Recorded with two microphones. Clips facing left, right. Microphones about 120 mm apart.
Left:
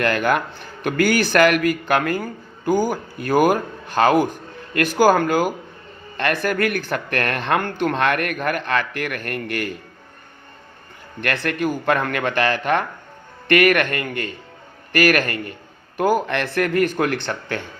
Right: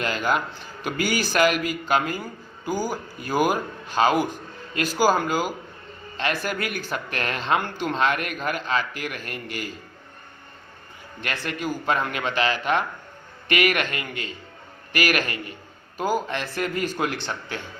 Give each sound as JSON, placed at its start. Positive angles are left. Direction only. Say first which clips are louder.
{"t": 0.0, "sound": "speech", "louder": "left 5 dB", "side_deg": 60}
{"t": 11.2, "sound": "a man's voice", "louder": "left 7 dB", "side_deg": 60}
{"t": 16.2, "sound": "speech", "louder": "left 6 dB", "side_deg": 65}